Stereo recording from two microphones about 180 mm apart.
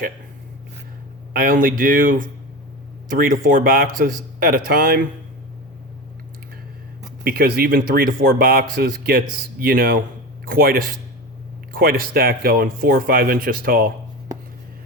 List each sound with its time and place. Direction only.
1.3 s speech: 50° right (ahead or behind)
7.3 s speech: 55° right (ahead or behind)